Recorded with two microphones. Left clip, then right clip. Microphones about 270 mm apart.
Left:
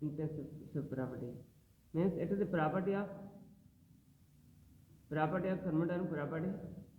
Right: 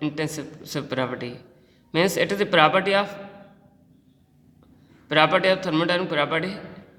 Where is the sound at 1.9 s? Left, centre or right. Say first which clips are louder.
Right 15 dB; right.